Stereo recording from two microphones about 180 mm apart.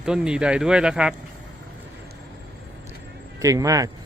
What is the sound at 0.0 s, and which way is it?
Speech, 5° right (ahead or behind).